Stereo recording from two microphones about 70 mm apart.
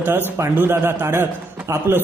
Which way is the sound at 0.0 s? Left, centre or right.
Right.